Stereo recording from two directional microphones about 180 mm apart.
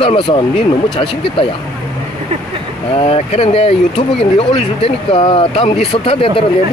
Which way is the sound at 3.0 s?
35° left (ahead or behind).